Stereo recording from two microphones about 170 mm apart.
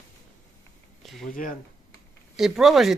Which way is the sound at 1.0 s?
Centre (ahead or behind).